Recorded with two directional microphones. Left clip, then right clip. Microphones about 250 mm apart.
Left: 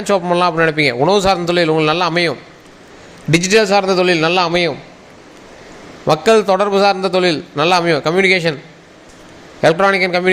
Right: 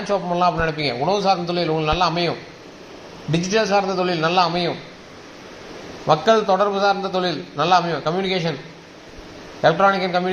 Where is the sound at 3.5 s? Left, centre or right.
Left.